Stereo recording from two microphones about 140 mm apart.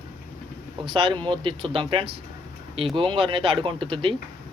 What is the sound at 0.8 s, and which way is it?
Speech, 40° right (ahead or behind).